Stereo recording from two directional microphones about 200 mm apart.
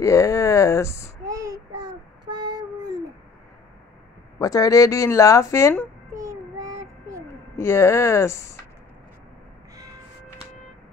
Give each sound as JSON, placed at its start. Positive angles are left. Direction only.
{"t": 0.0, "sound": "speech", "side_deg": 15}
{"t": 1.2, "sound": "child singing", "side_deg": -15}
{"t": 4.4, "sound": "speech", "side_deg": 20}
{"t": 6.1, "sound": "child singing", "side_deg": -15}
{"t": 7.5, "sound": "speech", "side_deg": 15}